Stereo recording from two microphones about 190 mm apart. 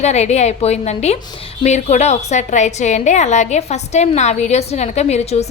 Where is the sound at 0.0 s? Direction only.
35° left (ahead or behind).